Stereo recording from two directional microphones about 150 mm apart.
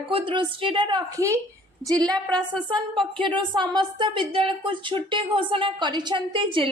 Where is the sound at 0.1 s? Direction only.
35° right (ahead or behind).